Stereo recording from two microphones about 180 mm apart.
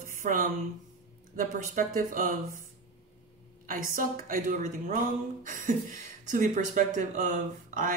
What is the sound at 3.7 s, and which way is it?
Speech, 50° right (ahead or behind).